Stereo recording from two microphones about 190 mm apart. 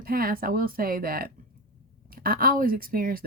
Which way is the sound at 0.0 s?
50° right (ahead or behind).